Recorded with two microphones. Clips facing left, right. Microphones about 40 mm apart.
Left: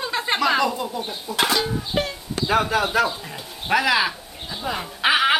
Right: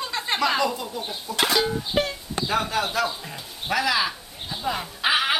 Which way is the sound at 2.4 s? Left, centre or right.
Centre.